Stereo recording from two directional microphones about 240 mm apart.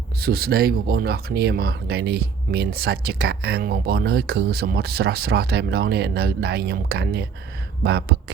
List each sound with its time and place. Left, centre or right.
0.2 s speech: right